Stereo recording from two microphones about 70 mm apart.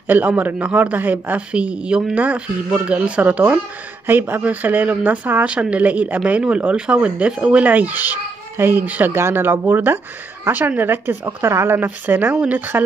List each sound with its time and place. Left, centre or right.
0.1 s speech: right
4.1 s speech: right